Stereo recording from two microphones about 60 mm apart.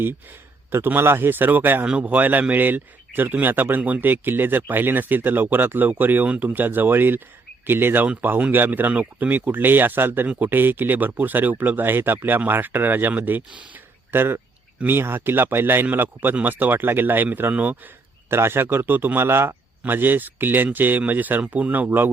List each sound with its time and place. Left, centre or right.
0.9 s speech: right
1.8 s a man's voice: right
8.0 s a man's voice: right
14.1 s speech: right
18.3 s speech: right